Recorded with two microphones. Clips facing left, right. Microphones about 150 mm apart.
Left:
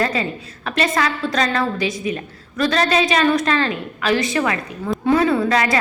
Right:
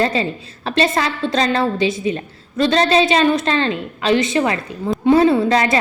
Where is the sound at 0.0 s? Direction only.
30° right (ahead or behind).